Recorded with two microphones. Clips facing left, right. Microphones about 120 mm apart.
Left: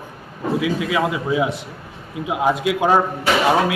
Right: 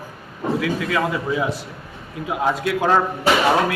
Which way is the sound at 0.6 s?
15° left (ahead or behind).